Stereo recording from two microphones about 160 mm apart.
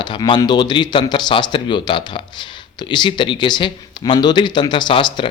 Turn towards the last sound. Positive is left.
turn(degrees=30)  # may be behind; listen again after turning